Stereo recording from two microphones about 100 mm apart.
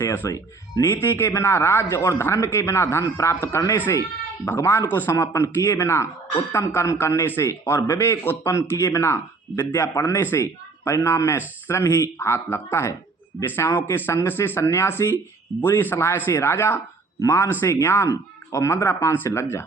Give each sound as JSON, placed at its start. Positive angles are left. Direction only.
{"t": 0.0, "sound": "speech", "side_deg": 20}
{"t": 0.3, "sound": "speech", "side_deg": 35}
{"t": 0.9, "sound": "speech", "side_deg": 25}